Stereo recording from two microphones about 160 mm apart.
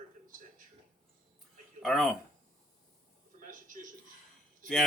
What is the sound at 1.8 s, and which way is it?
Speech, centre (ahead or behind).